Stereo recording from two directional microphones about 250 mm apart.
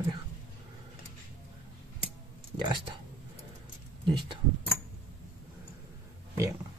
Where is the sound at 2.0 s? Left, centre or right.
Centre.